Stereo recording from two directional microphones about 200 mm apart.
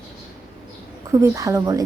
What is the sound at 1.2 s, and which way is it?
Speech, 15° right (ahead or behind).